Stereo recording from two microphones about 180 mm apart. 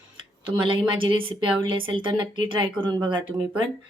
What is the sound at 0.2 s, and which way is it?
Speech, 30° right (ahead or behind).